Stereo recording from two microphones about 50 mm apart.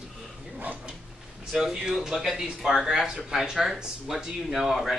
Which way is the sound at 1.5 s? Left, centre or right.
Centre.